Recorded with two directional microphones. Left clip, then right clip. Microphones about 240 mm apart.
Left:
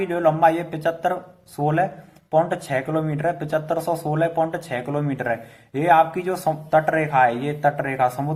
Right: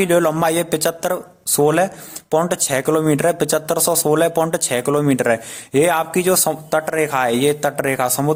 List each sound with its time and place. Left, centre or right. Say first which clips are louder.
0.0 s speech: right 2 dB; right